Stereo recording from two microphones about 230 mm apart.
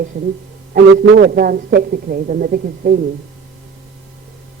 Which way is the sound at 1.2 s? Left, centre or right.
Right.